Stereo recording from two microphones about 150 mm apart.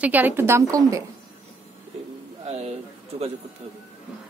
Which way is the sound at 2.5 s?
45° right (ahead or behind).